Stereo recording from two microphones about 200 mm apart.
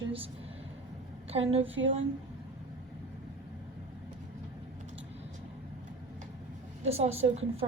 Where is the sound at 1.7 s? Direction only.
70° right (ahead or behind).